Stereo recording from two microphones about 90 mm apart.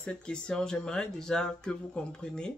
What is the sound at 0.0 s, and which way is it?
Speech, 10° left (ahead or behind).